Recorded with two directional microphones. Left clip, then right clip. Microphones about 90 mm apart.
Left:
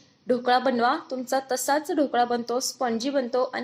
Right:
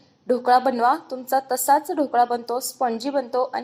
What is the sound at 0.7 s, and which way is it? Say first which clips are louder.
Speech: right 3 dB; 40° left (ahead or behind).